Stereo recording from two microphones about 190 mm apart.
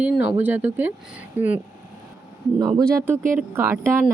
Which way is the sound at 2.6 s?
20° right (ahead or behind).